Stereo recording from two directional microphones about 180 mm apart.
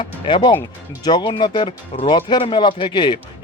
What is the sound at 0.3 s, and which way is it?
Speech, 25° left (ahead or behind).